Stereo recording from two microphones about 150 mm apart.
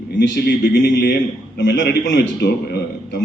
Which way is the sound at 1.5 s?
90° left.